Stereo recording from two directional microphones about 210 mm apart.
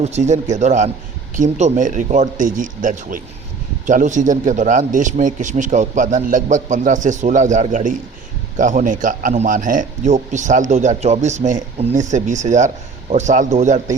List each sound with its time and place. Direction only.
0.0 s a man's voice: 35° right (ahead or behind)